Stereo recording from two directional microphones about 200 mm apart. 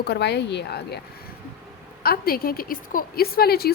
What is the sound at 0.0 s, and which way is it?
A woman's voice, 55° left (ahead or behind).